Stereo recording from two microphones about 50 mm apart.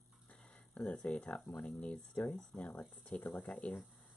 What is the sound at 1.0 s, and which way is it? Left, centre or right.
Speech, left.